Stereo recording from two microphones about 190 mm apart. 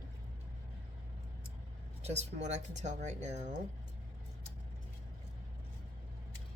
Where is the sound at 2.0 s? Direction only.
35° right (ahead or behind).